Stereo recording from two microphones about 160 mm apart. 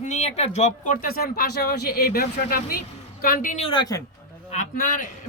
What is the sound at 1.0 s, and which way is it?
Speech, 70° left (ahead or behind).